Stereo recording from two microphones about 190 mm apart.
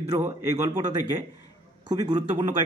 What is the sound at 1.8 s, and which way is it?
Speech, 20° right (ahead or behind).